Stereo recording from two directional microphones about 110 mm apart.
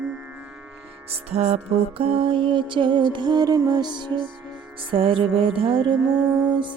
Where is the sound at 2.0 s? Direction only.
55° right (ahead or behind).